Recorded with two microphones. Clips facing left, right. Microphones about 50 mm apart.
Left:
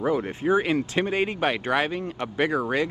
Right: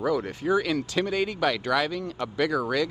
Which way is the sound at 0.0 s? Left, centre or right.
Left.